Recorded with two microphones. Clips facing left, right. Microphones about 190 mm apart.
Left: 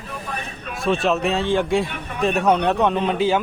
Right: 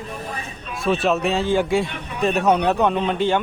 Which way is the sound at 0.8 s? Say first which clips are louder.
Even; centre (ahead or behind).